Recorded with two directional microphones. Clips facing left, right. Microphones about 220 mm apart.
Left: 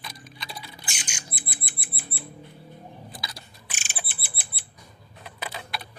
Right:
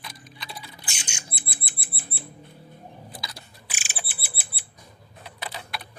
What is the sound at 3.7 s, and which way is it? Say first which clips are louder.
Bird: even; 5° right (ahead or behind).